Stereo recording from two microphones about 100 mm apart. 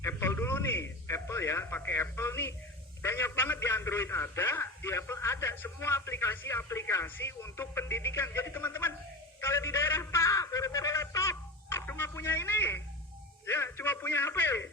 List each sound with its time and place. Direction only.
0.0 s radio: 25° left (ahead or behind)
3.0 s a man's voice: 25° left (ahead or behind)
9.4 s a sound: 25° left (ahead or behind)
13.4 s a man's voice: 25° left (ahead or behind)